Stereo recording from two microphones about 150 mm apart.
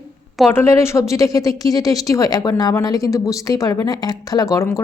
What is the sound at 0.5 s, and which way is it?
A woman's voice, 15° left (ahead or behind).